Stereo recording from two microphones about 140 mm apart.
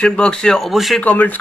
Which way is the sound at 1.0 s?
10° left (ahead or behind).